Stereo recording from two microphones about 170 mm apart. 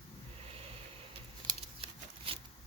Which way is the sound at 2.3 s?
35° right (ahead or behind).